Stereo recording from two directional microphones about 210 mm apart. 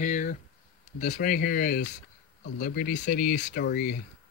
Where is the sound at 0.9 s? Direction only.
35° left (ahead or behind).